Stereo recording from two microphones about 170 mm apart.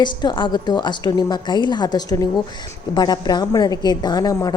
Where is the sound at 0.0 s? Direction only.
25° left (ahead or behind).